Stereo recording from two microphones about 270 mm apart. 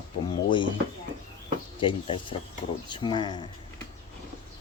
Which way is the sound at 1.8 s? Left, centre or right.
Centre.